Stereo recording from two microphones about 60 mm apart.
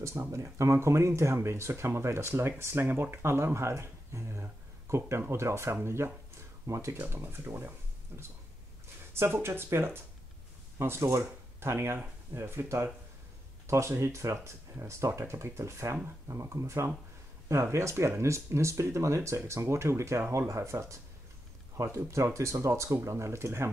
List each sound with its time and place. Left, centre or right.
0.0 s speech: right
6.7 s speech: right
7.0 s speech: right